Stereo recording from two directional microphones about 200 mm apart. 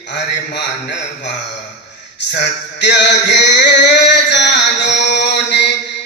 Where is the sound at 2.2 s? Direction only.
60° left (ahead or behind).